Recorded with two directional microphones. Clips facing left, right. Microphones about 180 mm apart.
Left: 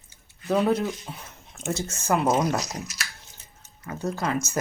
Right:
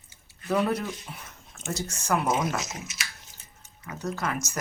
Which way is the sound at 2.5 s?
35° left (ahead or behind).